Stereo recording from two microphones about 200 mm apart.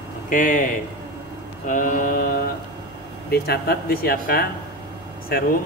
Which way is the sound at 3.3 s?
50° left (ahead or behind).